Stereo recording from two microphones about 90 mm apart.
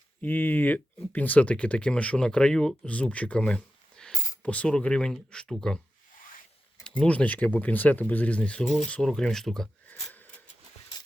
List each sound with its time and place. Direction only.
0.2 s speech: 20° left (ahead or behind)
6.8 s speech: 10° left (ahead or behind)
9.9 s a sound: 20° left (ahead or behind)